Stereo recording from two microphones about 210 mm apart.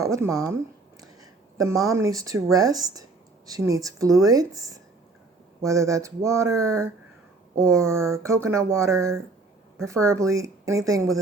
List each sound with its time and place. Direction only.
0.0 s speech: 15° right (ahead or behind)
1.0 s a sound: 15° right (ahead or behind)
1.9 s speech: 15° right (ahead or behind)